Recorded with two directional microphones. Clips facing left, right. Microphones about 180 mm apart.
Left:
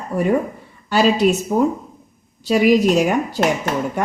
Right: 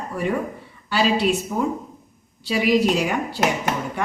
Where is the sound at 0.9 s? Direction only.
45° left (ahead or behind).